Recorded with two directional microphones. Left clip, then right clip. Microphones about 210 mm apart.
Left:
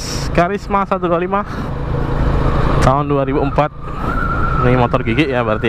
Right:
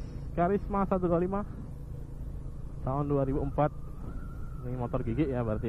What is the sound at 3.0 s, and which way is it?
A man's voice, 10° left (ahead or behind).